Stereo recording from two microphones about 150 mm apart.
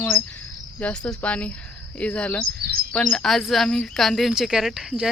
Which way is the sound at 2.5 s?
90° right.